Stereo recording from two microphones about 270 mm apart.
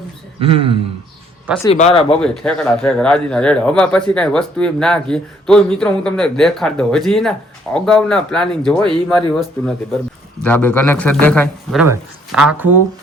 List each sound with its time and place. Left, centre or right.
0.3 s a man's voice: right
1.7 s speech: left
2.2 s speech: centre